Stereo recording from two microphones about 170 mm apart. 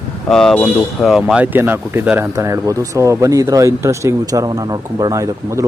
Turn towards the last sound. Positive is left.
turn(degrees=-15)  # may be behind; listen again after turning